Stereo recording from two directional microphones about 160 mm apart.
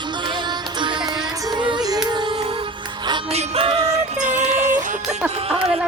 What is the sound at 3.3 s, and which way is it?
Music, 40° right (ahead or behind).